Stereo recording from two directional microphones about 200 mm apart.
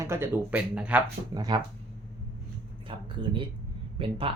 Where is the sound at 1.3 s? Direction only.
20° right (ahead or behind).